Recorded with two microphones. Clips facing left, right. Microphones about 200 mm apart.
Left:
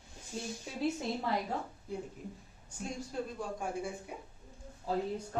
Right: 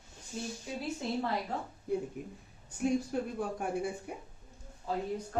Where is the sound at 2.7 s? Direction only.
60° right (ahead or behind).